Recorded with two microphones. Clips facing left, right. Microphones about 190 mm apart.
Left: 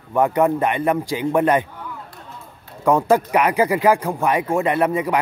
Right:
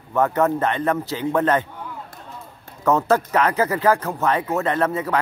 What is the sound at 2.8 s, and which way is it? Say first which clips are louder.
Speech: left 2 dB; 10° left (ahead or behind).